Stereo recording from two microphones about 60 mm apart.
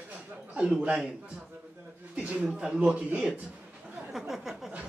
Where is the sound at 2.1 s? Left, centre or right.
Right.